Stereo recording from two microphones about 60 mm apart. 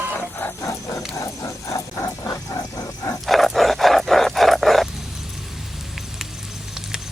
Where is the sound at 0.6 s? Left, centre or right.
Left.